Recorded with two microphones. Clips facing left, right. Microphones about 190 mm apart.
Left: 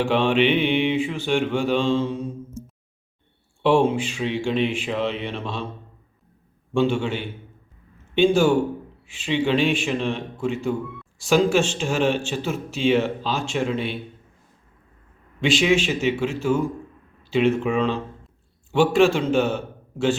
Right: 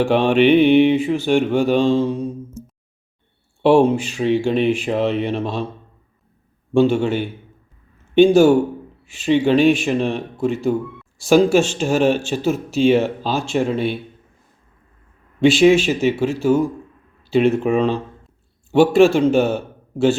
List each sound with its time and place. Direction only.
0.1 s mantra: 40° right (ahead or behind)
3.6 s mantra: 40° right (ahead or behind)
6.7 s mantra: 40° right (ahead or behind)
15.4 s mantra: 35° right (ahead or behind)